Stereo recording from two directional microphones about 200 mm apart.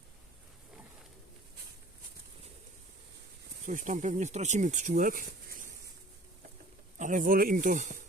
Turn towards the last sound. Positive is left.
turn(degrees=-40)  # may be behind; listen again after turning